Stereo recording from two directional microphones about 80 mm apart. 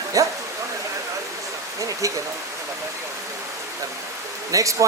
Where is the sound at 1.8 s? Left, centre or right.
Right.